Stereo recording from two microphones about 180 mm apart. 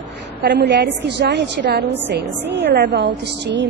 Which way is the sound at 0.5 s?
70° right (ahead or behind).